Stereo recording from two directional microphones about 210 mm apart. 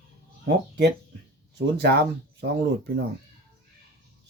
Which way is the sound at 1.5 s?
55° right (ahead or behind).